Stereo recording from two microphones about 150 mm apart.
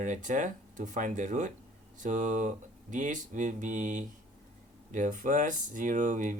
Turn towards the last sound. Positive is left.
turn(degrees=-60)  # may be behind; listen again after turning